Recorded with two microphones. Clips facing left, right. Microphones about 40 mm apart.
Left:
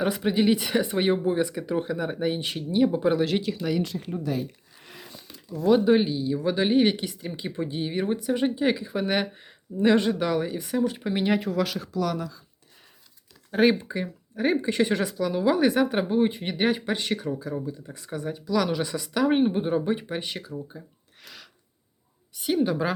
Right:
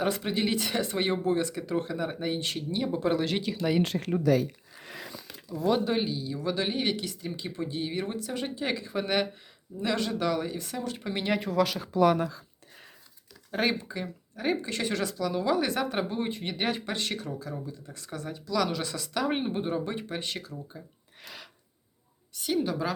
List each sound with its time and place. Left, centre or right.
0.0 s speech: centre
3.8 s speech: right
5.5 s speech: centre
5.8 s speech: centre
9.7 s speech: left; by 11.9 s centre
11.9 s speech: right
13.5 s speech: centre
22.4 s speech: centre